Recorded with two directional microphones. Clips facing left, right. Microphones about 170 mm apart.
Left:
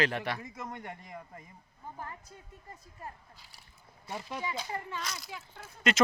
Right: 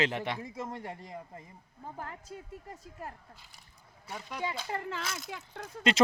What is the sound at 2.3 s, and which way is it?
Speech, 85° right.